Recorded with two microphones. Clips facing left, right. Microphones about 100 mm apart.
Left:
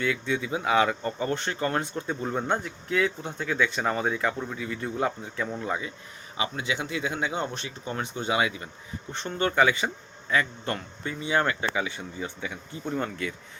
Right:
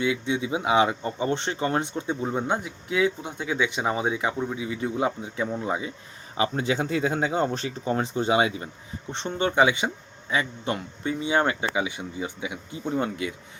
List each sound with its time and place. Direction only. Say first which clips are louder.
0.0 s speech: right 2 dB; 20° right (ahead or behind)
6.3 s speech: right 5 dB; 35° right (ahead or behind); by 13.3 s 15° right (ahead or behind)